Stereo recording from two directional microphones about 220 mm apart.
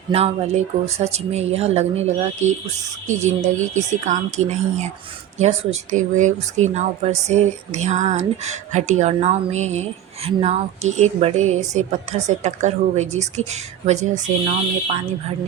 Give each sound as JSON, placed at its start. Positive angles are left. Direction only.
{"t": 0.1, "sound": "speech", "side_deg": -30}
{"t": 3.8, "sound": "speech", "side_deg": -35}